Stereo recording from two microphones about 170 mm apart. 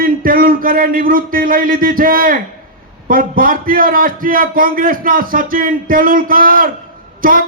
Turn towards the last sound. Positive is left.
turn(degrees=-55)  # may be behind; listen again after turning